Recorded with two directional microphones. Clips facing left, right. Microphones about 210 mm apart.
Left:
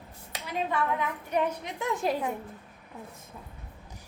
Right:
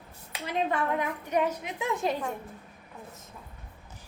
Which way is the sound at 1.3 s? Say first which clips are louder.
Right 1 dB; 10° right (ahead or behind).